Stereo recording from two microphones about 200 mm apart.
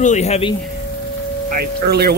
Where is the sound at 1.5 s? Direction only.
50° right (ahead or behind).